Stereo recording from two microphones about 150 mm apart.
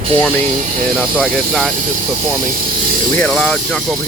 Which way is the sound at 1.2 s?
Centre (ahead or behind).